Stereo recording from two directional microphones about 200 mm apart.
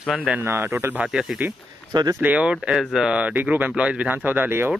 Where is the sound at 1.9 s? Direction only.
20° right (ahead or behind).